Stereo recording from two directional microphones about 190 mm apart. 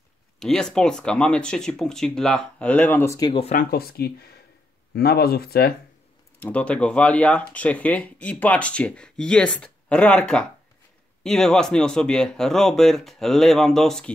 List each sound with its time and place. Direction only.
0.4 s speech: centre (ahead or behind)
3.3 s speech: 35° left (ahead or behind)
3.7 s speech: 55° left (ahead or behind)
6.4 s speech: 5° left (ahead or behind)